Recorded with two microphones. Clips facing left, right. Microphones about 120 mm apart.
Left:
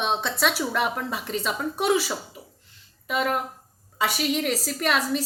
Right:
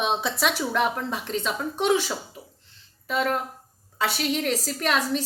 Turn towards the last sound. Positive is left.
turn(degrees=0)  # may be behind; listen again after turning